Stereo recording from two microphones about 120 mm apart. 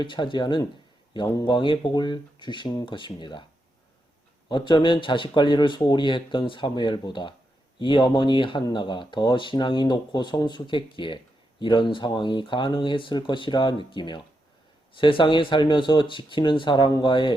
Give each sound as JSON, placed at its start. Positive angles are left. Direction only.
{"t": 0.0, "sound": "a man's voice", "side_deg": 40}
{"t": 4.4, "sound": "a man's voice", "side_deg": 40}